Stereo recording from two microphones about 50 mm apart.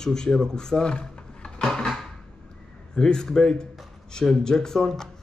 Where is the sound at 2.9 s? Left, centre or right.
Centre.